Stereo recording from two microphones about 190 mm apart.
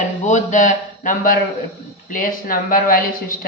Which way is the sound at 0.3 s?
40° left (ahead or behind).